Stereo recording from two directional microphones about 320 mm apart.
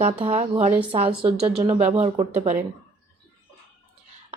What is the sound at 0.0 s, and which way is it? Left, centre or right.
A woman's voice, centre.